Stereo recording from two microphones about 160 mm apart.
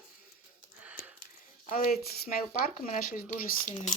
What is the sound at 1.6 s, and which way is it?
Speech, 65° left (ahead or behind).